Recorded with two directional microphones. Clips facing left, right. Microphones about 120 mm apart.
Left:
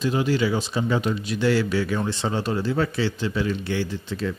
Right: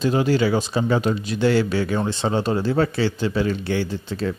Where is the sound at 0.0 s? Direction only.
40° right (ahead or behind).